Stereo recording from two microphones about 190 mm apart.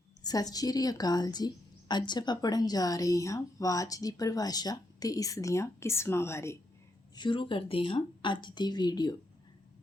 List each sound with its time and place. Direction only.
0.2 s a woman's voice: 20° left (ahead or behind)
7.2 s a woman's voice: 25° left (ahead or behind)